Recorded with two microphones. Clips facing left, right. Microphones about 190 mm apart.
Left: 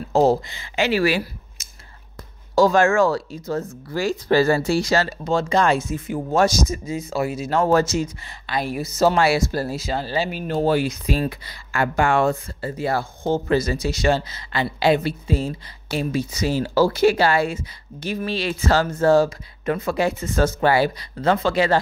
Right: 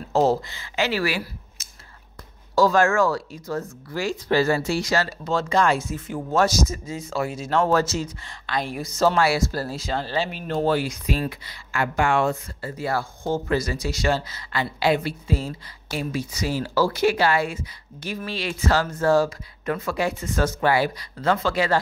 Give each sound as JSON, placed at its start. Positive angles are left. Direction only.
{"t": 0.1, "sound": "speech", "side_deg": 15}
{"t": 4.0, "sound": "speech", "side_deg": 40}
{"t": 5.2, "sound": "speech", "side_deg": 15}
{"t": 9.2, "sound": "speech", "side_deg": 20}
{"t": 9.8, "sound": "speech", "side_deg": 10}
{"t": 10.9, "sound": "speech", "side_deg": 35}
{"t": 12.6, "sound": "speech", "side_deg": 20}